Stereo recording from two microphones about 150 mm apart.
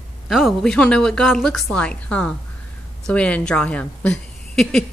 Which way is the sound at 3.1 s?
10° left (ahead or behind).